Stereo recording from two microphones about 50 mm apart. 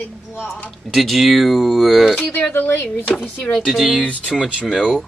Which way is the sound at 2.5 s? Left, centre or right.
Left.